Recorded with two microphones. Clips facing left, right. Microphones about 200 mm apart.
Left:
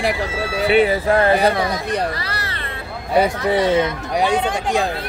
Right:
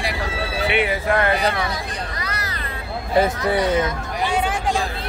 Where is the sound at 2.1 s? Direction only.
30° left (ahead or behind).